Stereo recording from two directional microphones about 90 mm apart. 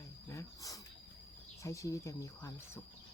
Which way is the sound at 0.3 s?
40° left (ahead or behind).